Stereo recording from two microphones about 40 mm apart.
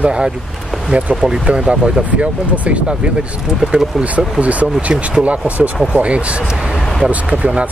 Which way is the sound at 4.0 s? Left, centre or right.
Right.